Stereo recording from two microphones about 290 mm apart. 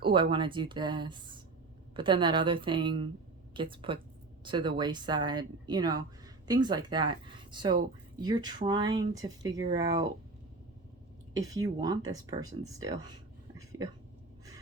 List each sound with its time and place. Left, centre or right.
0.0 s speech: centre
11.3 s speech: centre